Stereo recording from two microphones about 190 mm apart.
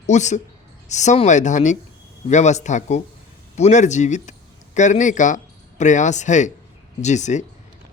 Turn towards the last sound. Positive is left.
turn(degrees=40)  # may be behind; listen again after turning